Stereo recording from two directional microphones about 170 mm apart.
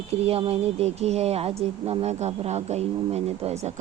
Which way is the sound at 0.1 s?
35° right (ahead or behind).